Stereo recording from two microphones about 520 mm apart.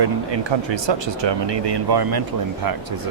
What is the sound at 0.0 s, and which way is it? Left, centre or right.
Speech, right.